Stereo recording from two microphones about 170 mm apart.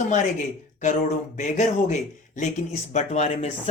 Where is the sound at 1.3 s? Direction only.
45° left (ahead or behind).